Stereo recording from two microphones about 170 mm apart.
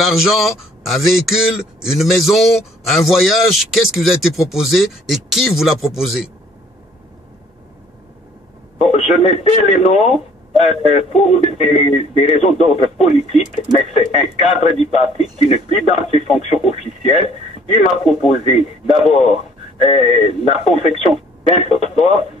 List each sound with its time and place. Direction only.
0.0 s a man's voice: centre (ahead or behind)
8.7 s speech: 40° left (ahead or behind)